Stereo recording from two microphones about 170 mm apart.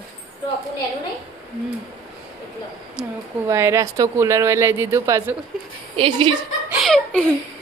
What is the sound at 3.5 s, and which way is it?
Speech, 15° right (ahead or behind).